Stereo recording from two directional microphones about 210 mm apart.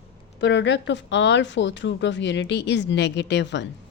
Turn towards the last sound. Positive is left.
turn(degrees=55)  # may be behind; listen again after turning